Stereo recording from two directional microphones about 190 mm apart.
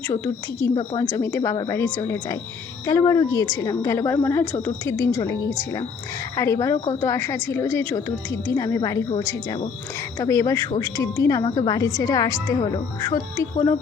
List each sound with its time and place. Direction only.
1.1 s a woman's voice: 15° left (ahead or behind)